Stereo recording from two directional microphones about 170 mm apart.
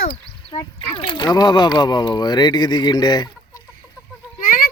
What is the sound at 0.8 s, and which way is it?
Speech, 30° left (ahead or behind).